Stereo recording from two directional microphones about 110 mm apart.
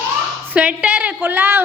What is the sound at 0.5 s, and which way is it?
A woman's voice, 10° right (ahead or behind).